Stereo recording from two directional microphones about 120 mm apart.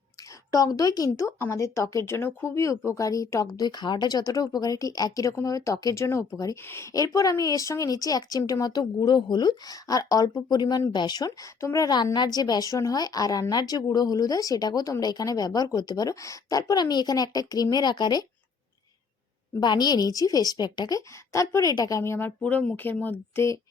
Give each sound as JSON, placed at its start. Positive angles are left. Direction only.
{"t": 0.5, "sound": "a woman's voice", "side_deg": 30}
{"t": 11.3, "sound": "a woman's voice", "side_deg": 25}
{"t": 19.5, "sound": "a woman's voice", "side_deg": 35}